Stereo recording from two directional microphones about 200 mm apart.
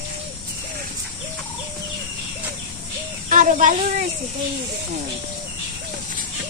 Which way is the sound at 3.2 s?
40° right (ahead or behind).